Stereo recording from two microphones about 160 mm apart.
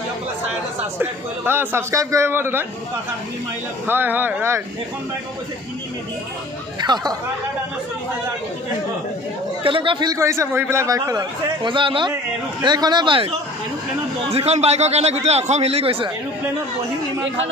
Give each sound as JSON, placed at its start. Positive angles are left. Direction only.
{"t": 0.9, "sound": "a man's voice", "side_deg": -10}
{"t": 3.8, "sound": "a man's voice", "side_deg": -10}
{"t": 6.8, "sound": "speech", "side_deg": -25}
{"t": 9.6, "sound": "speech", "side_deg": -30}
{"t": 14.3, "sound": "a man's voice", "side_deg": -40}